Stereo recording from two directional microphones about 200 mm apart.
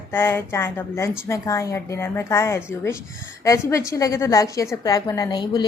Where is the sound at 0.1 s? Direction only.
10° left (ahead or behind).